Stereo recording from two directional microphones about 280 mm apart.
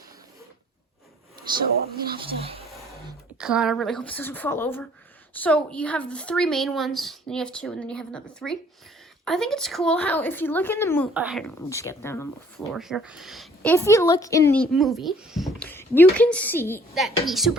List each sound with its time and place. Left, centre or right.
2.1 s speech: right
3.3 s speech: centre
11.1 s speech: centre
14.7 s speech: centre